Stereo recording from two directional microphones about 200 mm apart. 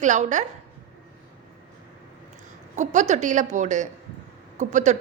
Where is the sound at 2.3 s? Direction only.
35° right (ahead or behind).